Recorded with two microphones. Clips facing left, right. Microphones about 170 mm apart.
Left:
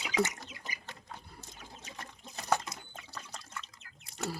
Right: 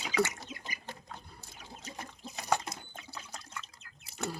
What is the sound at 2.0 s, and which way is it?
Water, centre (ahead or behind).